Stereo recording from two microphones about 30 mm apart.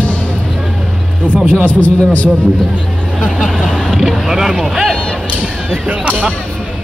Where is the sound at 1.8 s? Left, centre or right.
Left.